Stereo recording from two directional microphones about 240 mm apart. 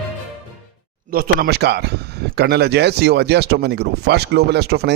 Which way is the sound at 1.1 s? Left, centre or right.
Right.